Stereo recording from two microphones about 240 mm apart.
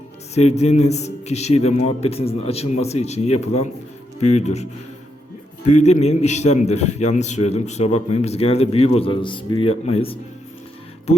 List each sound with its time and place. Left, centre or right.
0.3 s a man's voice: left